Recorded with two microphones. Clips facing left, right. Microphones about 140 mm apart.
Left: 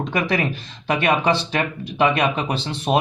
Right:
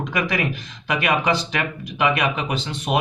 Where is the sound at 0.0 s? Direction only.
30° left (ahead or behind).